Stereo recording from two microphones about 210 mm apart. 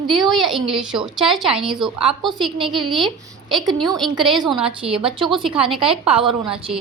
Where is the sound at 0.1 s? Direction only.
Centre (ahead or behind).